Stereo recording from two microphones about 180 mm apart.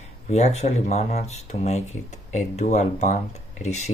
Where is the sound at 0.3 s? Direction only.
35° left (ahead or behind).